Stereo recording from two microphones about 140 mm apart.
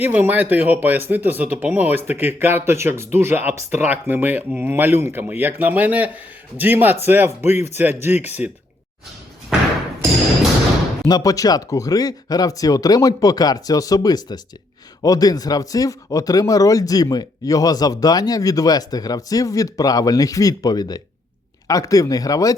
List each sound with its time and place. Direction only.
0.0 s speech: 10° right (ahead or behind)
11.0 s speech: 25° left (ahead or behind)